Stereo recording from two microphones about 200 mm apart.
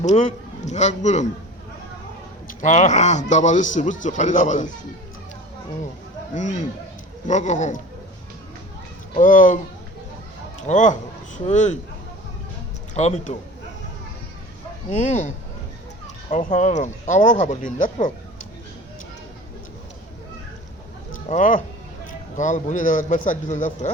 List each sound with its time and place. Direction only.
0.0 s speech: 35° left (ahead or behind)
2.5 s speech: 35° left (ahead or behind)
6.3 s speech: 35° left (ahead or behind)
9.1 s speech: 40° left (ahead or behind)
10.7 s speech: 35° left (ahead or behind)
12.9 s speech: 35° left (ahead or behind)
14.8 s speech: 35° left (ahead or behind)
16.3 s speech: 35° left (ahead or behind)
21.2 s speech: 40° left (ahead or behind)